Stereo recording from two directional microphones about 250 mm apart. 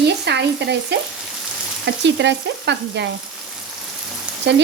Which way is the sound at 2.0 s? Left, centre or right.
Right.